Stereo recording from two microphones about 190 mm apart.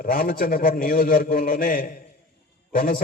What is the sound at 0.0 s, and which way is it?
A man's voice, 50° left (ahead or behind).